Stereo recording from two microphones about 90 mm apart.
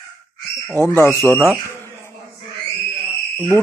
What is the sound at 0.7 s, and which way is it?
Speech, 25° left (ahead or behind).